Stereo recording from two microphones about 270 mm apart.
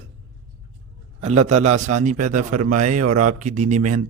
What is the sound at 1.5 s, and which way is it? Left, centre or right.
Speech, right.